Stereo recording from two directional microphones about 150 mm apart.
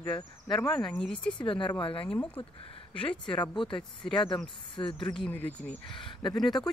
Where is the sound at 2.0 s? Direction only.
10° left (ahead or behind).